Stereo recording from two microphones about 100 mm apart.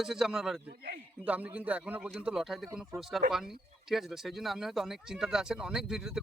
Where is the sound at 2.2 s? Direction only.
5° right (ahead or behind).